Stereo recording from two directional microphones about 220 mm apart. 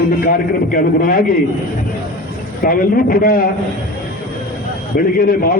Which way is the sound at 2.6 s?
40° left (ahead or behind).